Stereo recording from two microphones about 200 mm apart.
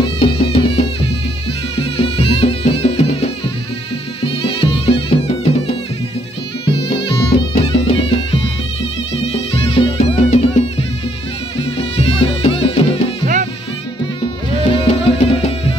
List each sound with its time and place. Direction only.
0.0 s music: 30° left (ahead or behind)
7.1 s music: 25° left (ahead or behind)
13.2 s music: 40° right (ahead or behind)
14.6 s music: 25° left (ahead or behind)